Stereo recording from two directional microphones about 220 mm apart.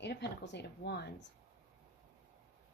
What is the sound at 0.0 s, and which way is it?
Speech, 50° left (ahead or behind).